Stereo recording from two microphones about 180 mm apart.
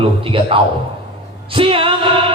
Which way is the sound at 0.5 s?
30° right (ahead or behind).